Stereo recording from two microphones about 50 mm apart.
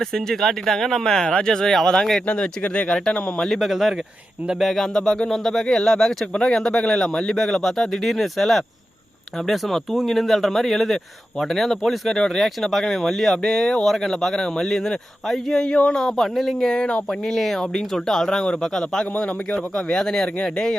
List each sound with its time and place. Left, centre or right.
0.0 s speech: centre
2.2 s speech: left
3.5 s speech: centre
7.3 s speech: centre
15.6 s speech: centre
17.2 s speech: centre